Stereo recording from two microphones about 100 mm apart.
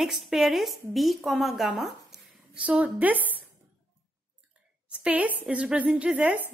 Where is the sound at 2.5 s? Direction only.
15° right (ahead or behind).